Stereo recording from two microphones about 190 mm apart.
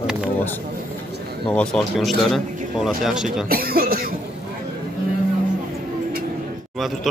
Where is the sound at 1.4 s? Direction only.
5° left (ahead or behind).